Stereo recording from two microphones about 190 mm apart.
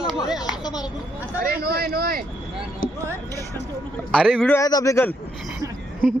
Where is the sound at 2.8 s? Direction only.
90° left.